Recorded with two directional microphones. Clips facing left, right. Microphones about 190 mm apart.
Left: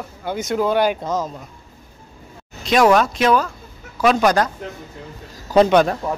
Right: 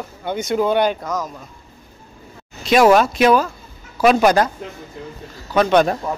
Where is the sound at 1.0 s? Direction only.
25° left (ahead or behind).